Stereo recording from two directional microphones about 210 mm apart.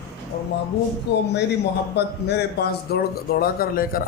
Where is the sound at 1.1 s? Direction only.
55° left (ahead or behind).